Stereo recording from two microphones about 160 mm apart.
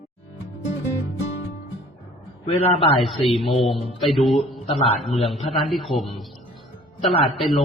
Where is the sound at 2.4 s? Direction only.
40° left (ahead or behind).